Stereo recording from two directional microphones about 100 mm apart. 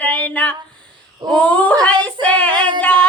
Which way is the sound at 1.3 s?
10° left (ahead or behind).